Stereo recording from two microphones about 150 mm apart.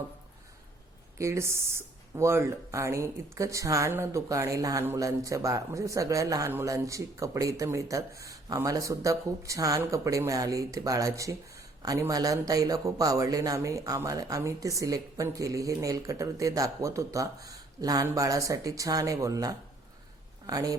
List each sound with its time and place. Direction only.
1.2 s speech: 20° right (ahead or behind)